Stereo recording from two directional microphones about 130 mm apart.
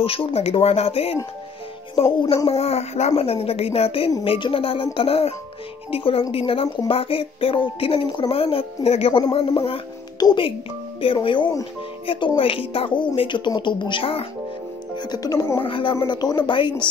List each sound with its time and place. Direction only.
0.0 s speech: 45° left (ahead or behind)
2.2 s a child's voice: 45° left (ahead or behind)
15.0 s speech: 30° left (ahead or behind)
15.6 s speech: 40° left (ahead or behind)